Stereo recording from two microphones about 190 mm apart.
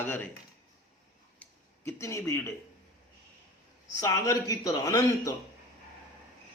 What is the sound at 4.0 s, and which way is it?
A man's voice, 15° left (ahead or behind).